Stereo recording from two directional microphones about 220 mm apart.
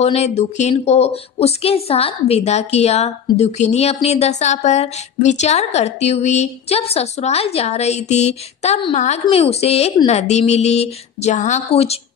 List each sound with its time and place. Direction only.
0.0 s speech: 30° left (ahead or behind)